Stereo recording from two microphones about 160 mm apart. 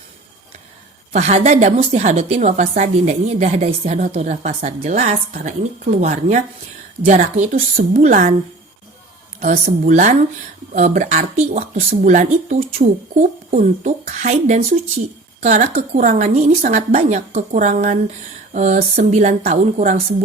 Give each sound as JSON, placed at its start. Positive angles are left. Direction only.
{"t": 1.1, "sound": "a woman's voice", "side_deg": -45}
{"t": 9.4, "sound": "a woman's voice", "side_deg": -45}
{"t": 16.6, "sound": "a woman's voice", "side_deg": -60}
{"t": 17.0, "sound": "a woman's voice", "side_deg": -45}